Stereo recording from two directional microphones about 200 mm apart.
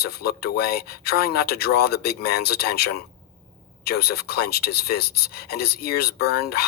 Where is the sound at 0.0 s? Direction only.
50° left (ahead or behind).